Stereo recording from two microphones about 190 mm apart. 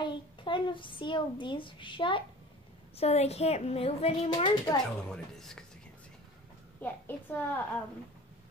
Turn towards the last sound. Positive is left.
turn(degrees=10)  # may be behind; listen again after turning